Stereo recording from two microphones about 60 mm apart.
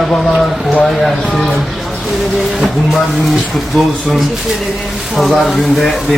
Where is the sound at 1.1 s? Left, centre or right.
Centre.